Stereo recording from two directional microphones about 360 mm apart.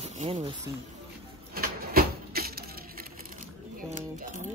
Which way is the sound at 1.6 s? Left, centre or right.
Right.